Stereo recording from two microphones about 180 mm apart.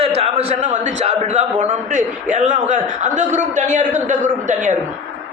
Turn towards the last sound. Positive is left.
turn(degrees=-45)  # may be behind; listen again after turning